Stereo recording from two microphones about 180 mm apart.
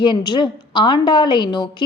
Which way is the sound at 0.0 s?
25° left (ahead or behind).